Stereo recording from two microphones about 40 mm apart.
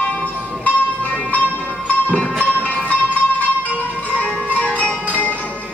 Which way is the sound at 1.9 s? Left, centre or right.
Left.